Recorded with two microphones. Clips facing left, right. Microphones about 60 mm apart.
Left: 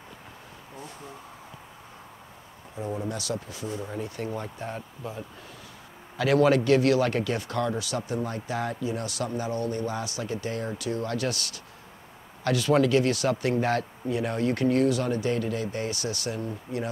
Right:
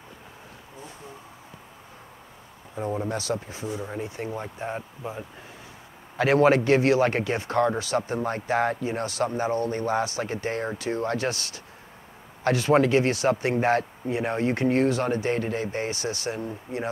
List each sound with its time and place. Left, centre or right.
2.9 s speech: right
3.6 s speech: centre